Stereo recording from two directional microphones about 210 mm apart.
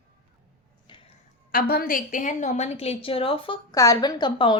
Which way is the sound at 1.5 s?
45° left (ahead or behind).